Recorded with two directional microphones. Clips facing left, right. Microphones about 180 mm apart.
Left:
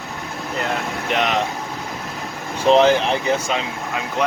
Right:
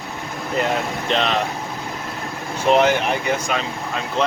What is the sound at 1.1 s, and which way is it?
Speech, 15° left (ahead or behind).